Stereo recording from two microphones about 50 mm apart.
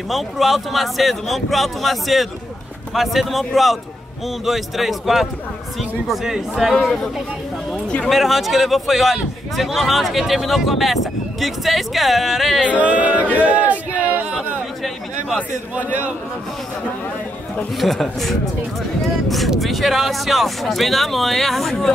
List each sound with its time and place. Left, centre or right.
0.1 s a man's voice: centre
6.8 s speech: centre
8.1 s a man's voice: centre
12.8 s speech: right
13.4 s crowd: right
17.7 s a man's voice: centre